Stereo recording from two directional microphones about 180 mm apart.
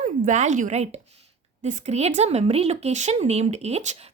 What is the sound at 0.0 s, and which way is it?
A woman's voice, 40° right (ahead or behind).